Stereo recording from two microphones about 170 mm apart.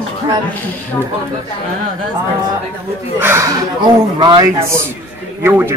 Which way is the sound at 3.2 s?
15° right (ahead or behind).